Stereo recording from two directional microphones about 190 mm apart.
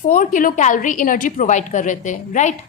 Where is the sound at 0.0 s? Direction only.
45° left (ahead or behind).